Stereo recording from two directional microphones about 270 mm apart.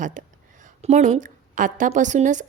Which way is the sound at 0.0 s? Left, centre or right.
Right.